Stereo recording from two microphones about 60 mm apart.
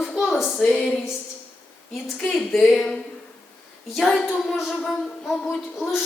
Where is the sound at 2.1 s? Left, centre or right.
Centre.